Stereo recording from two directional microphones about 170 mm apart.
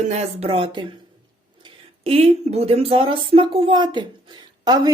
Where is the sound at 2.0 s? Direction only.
35° right (ahead or behind).